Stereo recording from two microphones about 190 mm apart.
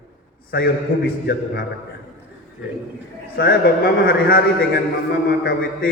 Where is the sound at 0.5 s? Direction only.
55° left (ahead or behind).